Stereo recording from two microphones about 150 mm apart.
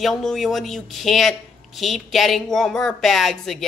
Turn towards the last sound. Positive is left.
turn(degrees=0)  # may be behind; listen again after turning